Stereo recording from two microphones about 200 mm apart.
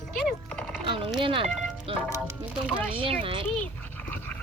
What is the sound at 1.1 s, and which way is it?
Music, 25° right (ahead or behind).